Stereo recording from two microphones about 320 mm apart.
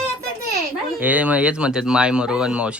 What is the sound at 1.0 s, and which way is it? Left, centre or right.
Speech, centre.